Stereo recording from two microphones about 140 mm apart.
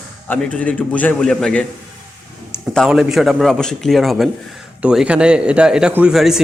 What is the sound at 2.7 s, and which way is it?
A man's voice, centre (ahead or behind).